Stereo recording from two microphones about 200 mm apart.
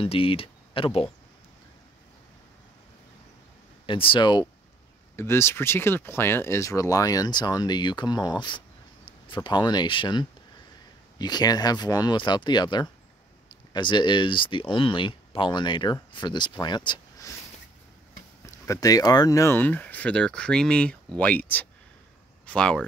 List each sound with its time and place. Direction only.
0.0 s speech: 25° left (ahead or behind)
3.8 s speech: 25° left (ahead or behind)
18.4 s speech: 15° left (ahead or behind)